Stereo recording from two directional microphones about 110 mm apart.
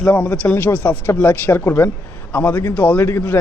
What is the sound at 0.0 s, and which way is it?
A man's voice, 15° left (ahead or behind).